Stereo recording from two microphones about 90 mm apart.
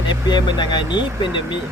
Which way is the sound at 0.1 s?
55° left (ahead or behind).